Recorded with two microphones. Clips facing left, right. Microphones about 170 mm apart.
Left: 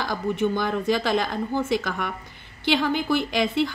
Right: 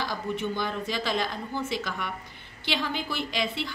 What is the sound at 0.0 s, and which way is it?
A woman's voice, 50° left (ahead or behind).